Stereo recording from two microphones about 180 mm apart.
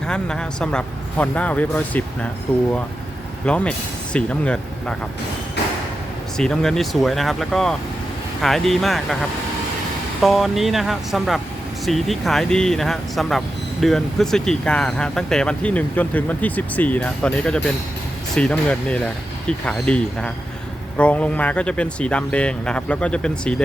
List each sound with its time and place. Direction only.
0.1 s speech: 5° left (ahead or behind)
3.4 s speech: 5° left (ahead or behind)
6.3 s speech: 5° left (ahead or behind)
10.2 s speech: centre (ahead or behind)